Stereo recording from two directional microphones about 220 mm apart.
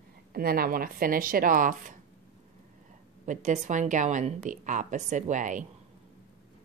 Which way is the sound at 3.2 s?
35° right (ahead or behind).